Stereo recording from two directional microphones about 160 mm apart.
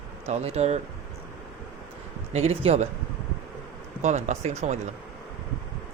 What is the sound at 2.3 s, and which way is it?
Speech, 40° right (ahead or behind).